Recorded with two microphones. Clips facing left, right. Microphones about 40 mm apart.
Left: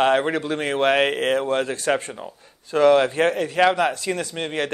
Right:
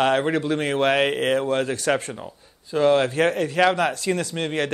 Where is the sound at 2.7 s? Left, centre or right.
Left.